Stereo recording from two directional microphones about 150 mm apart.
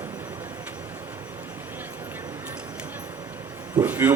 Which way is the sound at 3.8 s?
10° right (ahead or behind).